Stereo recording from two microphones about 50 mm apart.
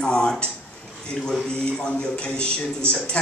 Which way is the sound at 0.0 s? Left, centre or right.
Centre.